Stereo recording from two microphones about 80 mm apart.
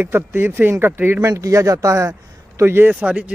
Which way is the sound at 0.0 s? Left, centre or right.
Right.